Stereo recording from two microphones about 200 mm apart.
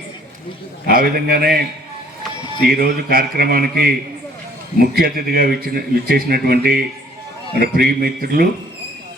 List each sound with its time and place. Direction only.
0.9 s a man's voice: 45° right (ahead or behind)
2.6 s a man's voice: 45° right (ahead or behind)